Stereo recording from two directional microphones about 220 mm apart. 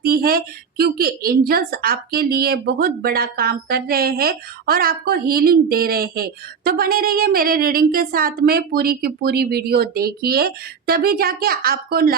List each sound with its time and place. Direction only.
0.0 s a woman's voice: 45° right (ahead or behind)